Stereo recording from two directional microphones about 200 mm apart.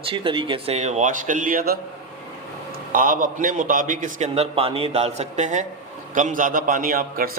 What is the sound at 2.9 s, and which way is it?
A man's voice, 45° right (ahead or behind).